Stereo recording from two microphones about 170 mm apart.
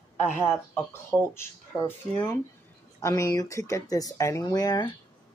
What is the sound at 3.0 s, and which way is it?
Speech, 20° left (ahead or behind).